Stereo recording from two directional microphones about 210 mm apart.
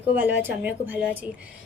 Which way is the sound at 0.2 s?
10° right (ahead or behind).